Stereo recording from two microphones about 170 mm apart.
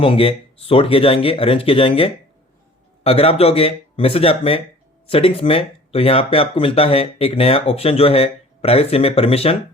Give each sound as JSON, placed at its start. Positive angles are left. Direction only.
{"t": 0.0, "sound": "speech", "side_deg": 35}